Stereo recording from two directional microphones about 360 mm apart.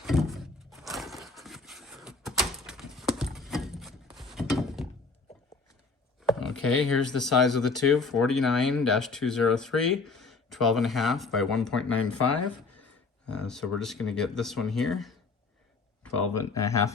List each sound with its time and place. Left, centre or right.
0.0 s a sound: centre
6.2 s a sound: centre
6.9 s speech: centre
12.0 s speech: left
13.3 s speech: centre
16.3 s speech: centre